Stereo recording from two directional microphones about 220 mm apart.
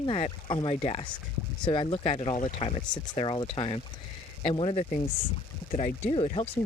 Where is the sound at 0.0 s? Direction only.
25° left (ahead or behind).